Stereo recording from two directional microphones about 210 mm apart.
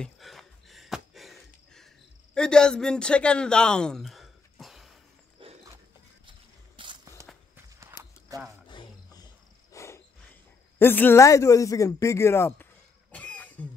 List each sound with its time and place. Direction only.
0.0 s a sound: centre (ahead or behind)
2.3 s speech: 5° left (ahead or behind)
5.4 s dog: 25° right (ahead or behind)
6.8 s a sound: 20° right (ahead or behind)
7.5 s walk: 15° right (ahead or behind)
8.6 s wild animals: 20° left (ahead or behind)
10.8 s speech: 10° left (ahead or behind)
13.1 s cough: 5° left (ahead or behind)